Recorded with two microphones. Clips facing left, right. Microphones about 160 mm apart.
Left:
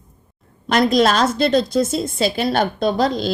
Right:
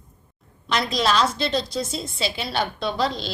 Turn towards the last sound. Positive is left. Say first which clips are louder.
# left 7 dB
turn(degrees=45)  # may be behind; listen again after turning